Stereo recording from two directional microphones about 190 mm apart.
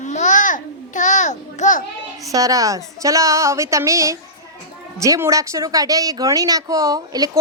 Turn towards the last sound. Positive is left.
turn(degrees=-20)  # may be behind; listen again after turning